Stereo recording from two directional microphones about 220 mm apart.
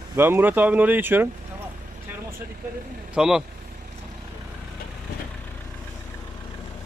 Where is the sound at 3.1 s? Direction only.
5° right (ahead or behind).